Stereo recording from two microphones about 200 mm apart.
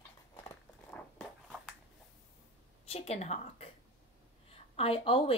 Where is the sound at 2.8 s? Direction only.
30° left (ahead or behind).